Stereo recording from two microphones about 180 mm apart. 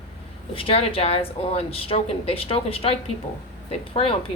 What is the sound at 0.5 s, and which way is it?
A woman's voice, 30° left (ahead or behind).